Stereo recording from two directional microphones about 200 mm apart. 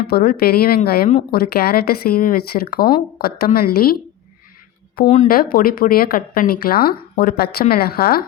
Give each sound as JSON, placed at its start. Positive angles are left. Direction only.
{"t": 0.1, "sound": "speech", "side_deg": 50}
{"t": 5.0, "sound": "speech", "side_deg": 35}